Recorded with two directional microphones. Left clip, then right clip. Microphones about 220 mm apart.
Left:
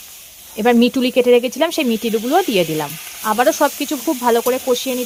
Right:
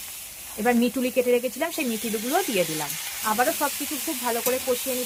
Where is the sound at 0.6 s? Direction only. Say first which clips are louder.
Left 9 dB; 50° left (ahead or behind).